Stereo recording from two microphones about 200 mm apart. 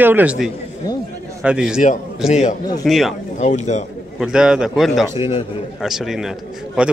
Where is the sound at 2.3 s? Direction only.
35° left (ahead or behind).